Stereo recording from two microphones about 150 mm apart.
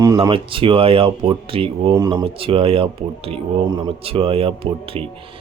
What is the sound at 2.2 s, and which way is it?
Speech, 35° right (ahead or behind).